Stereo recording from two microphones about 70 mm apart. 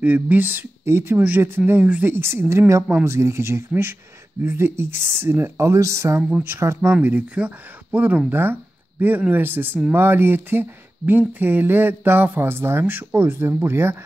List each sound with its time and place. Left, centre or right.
0.0 s speech: right
0.8 s speech: right
7.0 s speech: right